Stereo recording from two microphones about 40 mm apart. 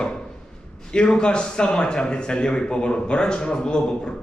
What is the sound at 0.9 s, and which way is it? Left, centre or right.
A man's voice, left.